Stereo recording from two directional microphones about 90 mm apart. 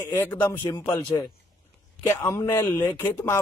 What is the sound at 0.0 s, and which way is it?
Speech, 25° left (ahead or behind).